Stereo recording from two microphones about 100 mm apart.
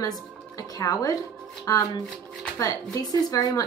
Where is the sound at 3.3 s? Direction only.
35° left (ahead or behind).